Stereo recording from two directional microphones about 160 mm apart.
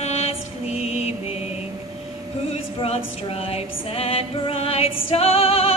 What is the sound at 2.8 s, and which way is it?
Music, 35° left (ahead or behind).